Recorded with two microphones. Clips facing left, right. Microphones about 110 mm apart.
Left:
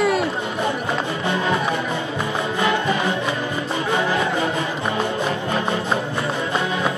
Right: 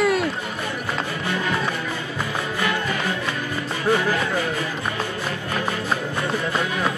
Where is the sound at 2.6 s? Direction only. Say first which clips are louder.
Left 5 dB; 20° left (ahead or behind).